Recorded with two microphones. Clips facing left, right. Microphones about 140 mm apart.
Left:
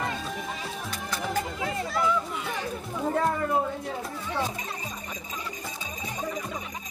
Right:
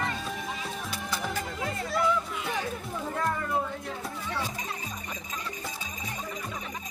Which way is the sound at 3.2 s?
30° left (ahead or behind).